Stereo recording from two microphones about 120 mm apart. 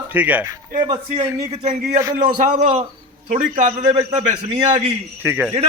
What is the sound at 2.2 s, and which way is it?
A man's voice, 90° right.